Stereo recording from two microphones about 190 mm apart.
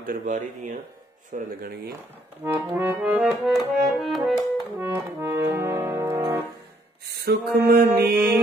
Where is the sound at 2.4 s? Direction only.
10° right (ahead or behind).